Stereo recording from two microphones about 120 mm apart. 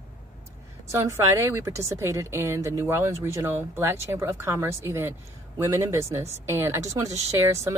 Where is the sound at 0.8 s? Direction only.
25° right (ahead or behind).